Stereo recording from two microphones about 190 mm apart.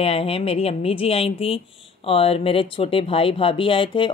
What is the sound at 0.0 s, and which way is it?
Speech, 30° left (ahead or behind).